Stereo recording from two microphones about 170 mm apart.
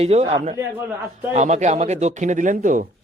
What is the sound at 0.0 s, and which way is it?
Speech, 40° right (ahead or behind).